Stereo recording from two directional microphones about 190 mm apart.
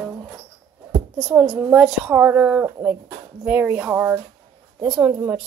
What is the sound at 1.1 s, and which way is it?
Speech, centre (ahead or behind).